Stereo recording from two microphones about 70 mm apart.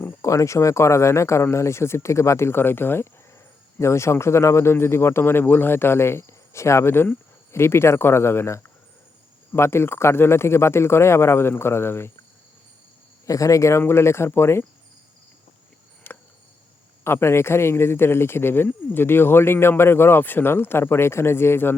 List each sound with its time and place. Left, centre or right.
0.2 s a man's voice: left
13.2 s a man's voice: left
16.1 s a sound: left
17.0 s a man's voice: left